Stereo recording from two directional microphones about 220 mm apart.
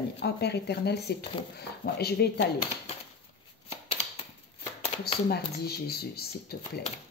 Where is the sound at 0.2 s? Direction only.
50° left (ahead or behind).